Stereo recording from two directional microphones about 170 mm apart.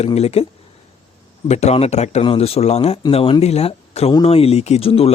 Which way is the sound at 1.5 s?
40° left (ahead or behind).